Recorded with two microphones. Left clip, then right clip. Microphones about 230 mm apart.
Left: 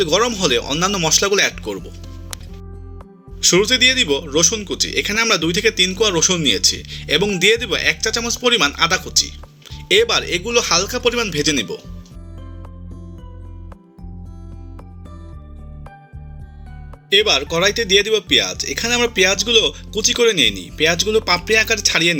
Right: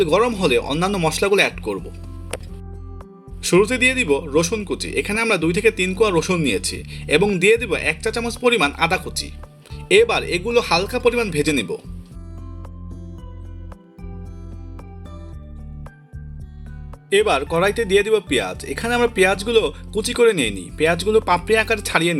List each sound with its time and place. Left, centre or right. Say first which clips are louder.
0.0 s a man's voice: even; centre
3.4 s a man's voice: left 3 dB; centre
17.1 s a man's voice: left 2 dB; centre